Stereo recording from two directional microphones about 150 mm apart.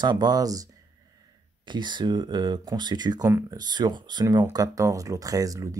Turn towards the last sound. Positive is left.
turn(degrees=-25)  # may be behind; listen again after turning